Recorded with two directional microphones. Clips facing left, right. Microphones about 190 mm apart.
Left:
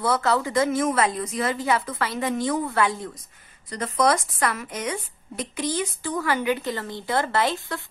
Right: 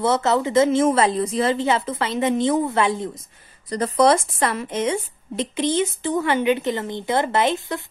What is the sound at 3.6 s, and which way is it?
A woman's voice, 35° right (ahead or behind).